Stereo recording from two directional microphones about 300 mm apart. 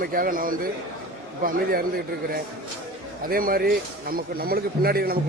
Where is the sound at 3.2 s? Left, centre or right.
Right.